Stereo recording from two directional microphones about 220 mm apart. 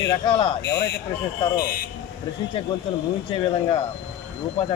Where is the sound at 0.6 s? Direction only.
50° left (ahead or behind).